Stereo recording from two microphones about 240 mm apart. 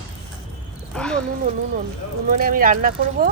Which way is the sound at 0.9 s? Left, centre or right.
Centre.